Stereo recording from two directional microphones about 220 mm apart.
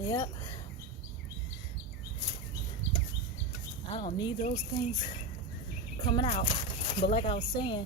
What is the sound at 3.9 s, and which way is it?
Speech, 20° left (ahead or behind).